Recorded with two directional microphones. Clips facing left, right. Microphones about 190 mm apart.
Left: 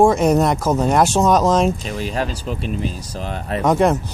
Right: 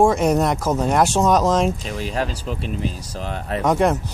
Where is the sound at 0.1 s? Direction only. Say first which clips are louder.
Left 2 dB; 30° left (ahead or behind).